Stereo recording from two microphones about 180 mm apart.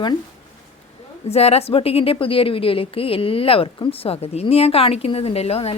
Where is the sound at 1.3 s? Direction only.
35° left (ahead or behind).